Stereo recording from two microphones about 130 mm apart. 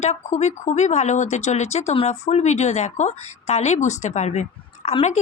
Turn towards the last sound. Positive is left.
turn(degrees=60)  # may be behind; listen again after turning